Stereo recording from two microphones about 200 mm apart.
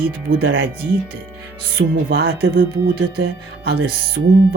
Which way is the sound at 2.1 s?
50° right (ahead or behind).